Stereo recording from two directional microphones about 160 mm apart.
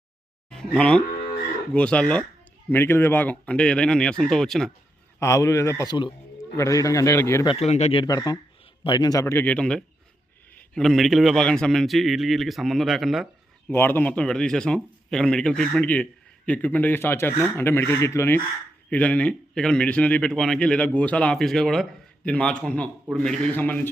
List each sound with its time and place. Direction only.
0.5 s a man's voice: 5° left (ahead or behind)
5.2 s a man's voice: 20° left (ahead or behind)
7.4 s speech: 40° left (ahead or behind)
8.0 s a man's voice: 25° left (ahead or behind); by 13.2 s centre (ahead or behind)
13.7 s a man's voice: 10° left (ahead or behind)